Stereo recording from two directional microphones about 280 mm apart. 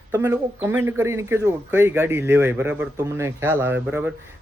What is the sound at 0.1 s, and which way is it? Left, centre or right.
Speech, centre.